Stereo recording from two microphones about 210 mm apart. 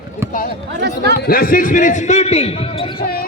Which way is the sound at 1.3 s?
45° left (ahead or behind).